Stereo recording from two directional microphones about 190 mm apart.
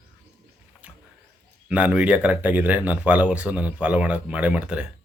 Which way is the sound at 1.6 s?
5° right (ahead or behind).